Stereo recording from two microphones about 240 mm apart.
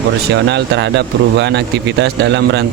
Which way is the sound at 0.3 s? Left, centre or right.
Right.